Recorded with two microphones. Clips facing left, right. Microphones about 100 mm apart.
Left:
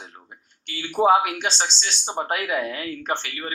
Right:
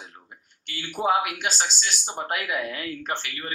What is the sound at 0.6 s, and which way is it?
Speech, 25° left (ahead or behind).